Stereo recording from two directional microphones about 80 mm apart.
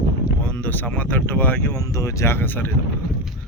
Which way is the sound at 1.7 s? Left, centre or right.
Left.